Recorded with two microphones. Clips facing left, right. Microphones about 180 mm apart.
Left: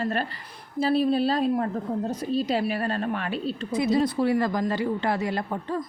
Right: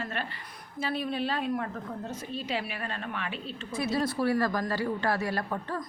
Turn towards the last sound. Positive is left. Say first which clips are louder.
# left 4 dB
turn(degrees=20)  # may be behind; listen again after turning